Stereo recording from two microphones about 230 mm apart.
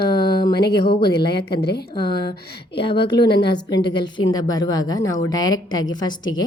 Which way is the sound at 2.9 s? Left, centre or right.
Left.